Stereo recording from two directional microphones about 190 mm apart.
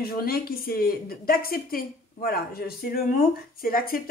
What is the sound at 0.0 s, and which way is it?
A woman's voice, 50° left (ahead or behind).